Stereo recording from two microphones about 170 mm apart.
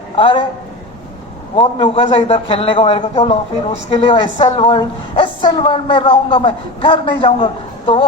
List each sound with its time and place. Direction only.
0.2 s a man's voice: 30° left (ahead or behind)
1.5 s a man's voice: 35° left (ahead or behind)